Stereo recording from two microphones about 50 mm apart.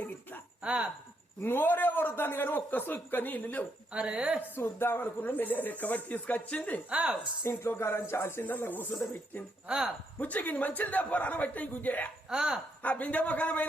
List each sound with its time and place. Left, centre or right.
0.0 s a sound: left
0.6 s speech: right
1.5 s a man's voice: left
3.9 s speech: right
4.5 s a man's voice: left
6.9 s speech: right
7.4 s speech: left
8.4 s a man's voice: left
9.6 s speech: centre
10.2 s a man's voice: left
12.3 s speech: centre
12.8 s a man's voice: left